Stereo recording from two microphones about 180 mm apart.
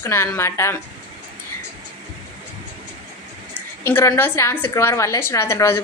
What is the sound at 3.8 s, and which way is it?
A woman's voice, 15° left (ahead or behind).